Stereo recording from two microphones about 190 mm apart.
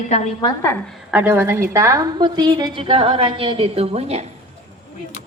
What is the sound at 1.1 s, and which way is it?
A woman's voice, 10° right (ahead or behind).